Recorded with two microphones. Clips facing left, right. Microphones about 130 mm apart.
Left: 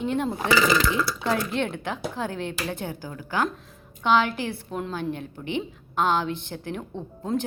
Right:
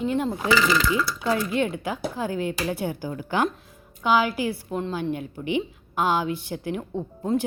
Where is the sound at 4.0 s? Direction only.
5° right (ahead or behind).